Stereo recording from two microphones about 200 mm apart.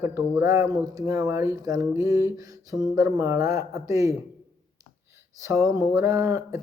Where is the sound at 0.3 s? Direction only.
15° right (ahead or behind).